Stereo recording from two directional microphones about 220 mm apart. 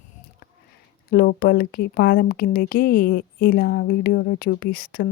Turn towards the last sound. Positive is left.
turn(degrees=40)  # may be behind; listen again after turning